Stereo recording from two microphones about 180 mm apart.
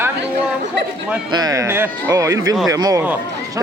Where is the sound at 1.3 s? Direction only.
20° right (ahead or behind).